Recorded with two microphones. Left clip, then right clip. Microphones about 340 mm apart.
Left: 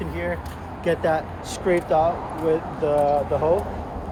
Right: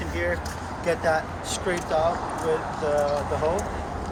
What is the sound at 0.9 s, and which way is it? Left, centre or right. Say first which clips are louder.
Speech: left 2 dB; left.